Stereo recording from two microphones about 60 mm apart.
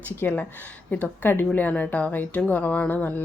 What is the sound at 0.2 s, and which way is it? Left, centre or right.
Speech, left.